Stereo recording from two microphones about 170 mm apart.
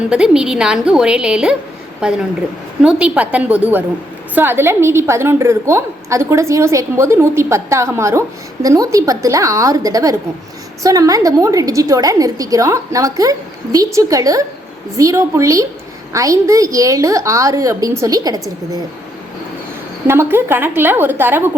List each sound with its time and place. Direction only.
0.1 s a woman's voice: 5° right (ahead or behind); by 18.8 s 20° right (ahead or behind)
20.1 s a woman's voice: 15° right (ahead or behind)